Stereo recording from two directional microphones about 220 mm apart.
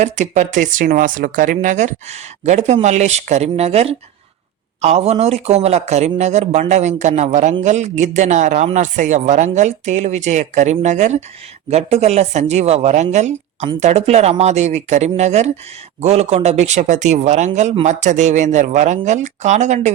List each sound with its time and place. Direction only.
0.0 s speech: 35° right (ahead or behind)